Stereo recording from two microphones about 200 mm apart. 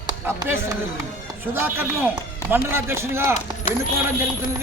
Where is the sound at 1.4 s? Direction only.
10° right (ahead or behind).